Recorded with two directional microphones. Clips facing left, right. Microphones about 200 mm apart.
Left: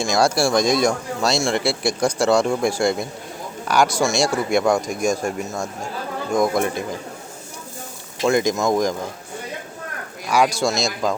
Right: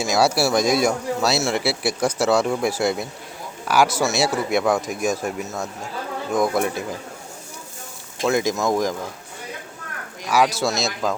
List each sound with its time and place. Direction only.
0.0 s speech: 5° right (ahead or behind)
8.2 s speech: 5° right (ahead or behind)
10.2 s speech: 5° right (ahead or behind)